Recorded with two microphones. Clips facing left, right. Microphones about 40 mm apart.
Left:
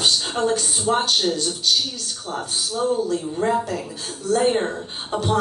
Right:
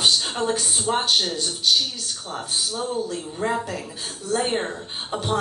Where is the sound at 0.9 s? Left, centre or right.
Centre.